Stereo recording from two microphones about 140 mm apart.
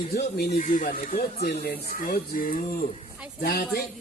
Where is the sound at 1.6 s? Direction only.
90° left.